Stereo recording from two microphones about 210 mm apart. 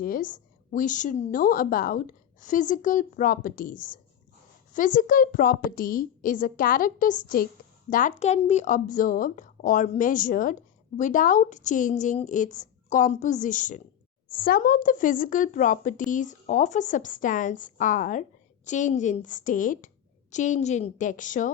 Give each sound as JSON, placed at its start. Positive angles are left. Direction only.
{"t": 0.0, "sound": "speech", "side_deg": 40}